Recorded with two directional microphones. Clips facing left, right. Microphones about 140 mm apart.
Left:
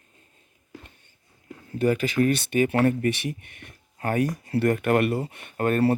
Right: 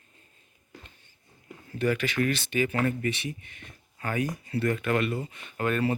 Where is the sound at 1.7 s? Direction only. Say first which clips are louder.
Left 4 dB; 35° left (ahead or behind).